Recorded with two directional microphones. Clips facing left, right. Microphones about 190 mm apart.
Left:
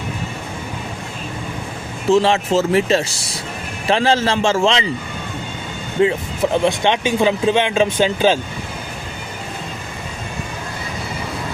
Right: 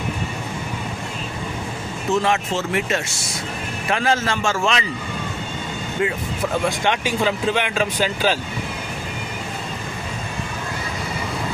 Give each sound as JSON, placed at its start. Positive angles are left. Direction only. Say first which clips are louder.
{"t": 2.0, "sound": "speech", "louder": "left 6 dB", "side_deg": 30}
{"t": 6.0, "sound": "speech", "louder": "left 7 dB", "side_deg": 25}